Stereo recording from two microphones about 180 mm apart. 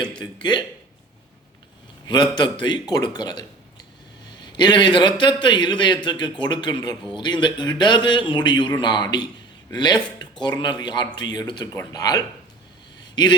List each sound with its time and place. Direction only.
2.3 s speech: 25° left (ahead or behind)
4.5 s speech: 25° left (ahead or behind)
13.0 s a sound: 25° left (ahead or behind)